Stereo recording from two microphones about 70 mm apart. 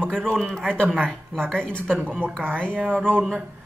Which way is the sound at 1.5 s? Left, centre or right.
Centre.